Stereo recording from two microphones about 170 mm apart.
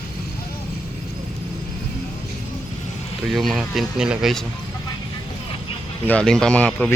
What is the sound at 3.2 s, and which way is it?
Speech, centre (ahead or behind).